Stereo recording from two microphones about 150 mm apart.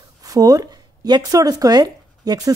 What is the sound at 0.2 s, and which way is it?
Speech, 25° right (ahead or behind).